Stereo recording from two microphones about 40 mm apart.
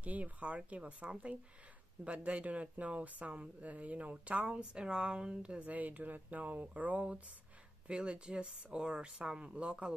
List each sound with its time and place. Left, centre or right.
0.0 s speech: right
5.6 s speech: right
7.9 s speech: right